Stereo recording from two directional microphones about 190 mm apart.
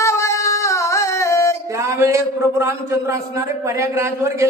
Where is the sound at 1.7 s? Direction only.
15° right (ahead or behind).